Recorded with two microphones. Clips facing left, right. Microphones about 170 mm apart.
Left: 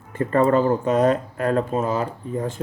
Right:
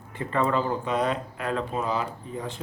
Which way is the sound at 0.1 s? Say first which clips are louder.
Left 7 dB; 45° left (ahead or behind).